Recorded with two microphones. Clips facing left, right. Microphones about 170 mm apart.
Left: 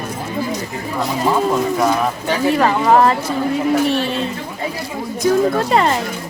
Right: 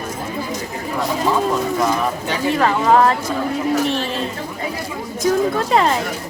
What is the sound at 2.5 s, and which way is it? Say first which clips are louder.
Speech: left 1 dB; 5° left (ahead or behind).